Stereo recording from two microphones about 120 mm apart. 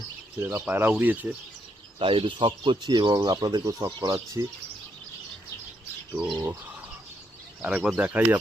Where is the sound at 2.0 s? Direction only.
45° right (ahead or behind).